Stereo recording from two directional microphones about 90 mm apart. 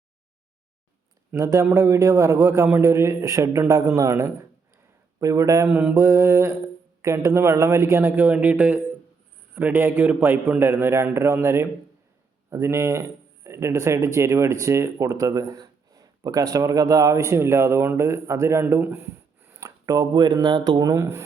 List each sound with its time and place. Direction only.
1.4 s speech: 35° right (ahead or behind)
5.6 s speech: 20° right (ahead or behind)